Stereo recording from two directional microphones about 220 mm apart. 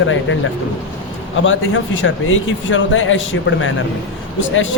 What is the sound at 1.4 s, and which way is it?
A man's voice, 60° left (ahead or behind).